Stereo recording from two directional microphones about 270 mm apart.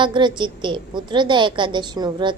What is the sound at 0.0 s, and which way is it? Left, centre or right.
A woman's voice, centre.